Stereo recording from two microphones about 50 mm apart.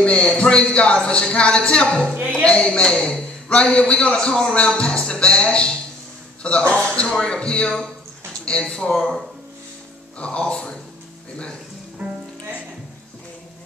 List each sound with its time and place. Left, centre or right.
0.0 s a man's voice: left
10.1 s a man's voice: left
12.0 s music: right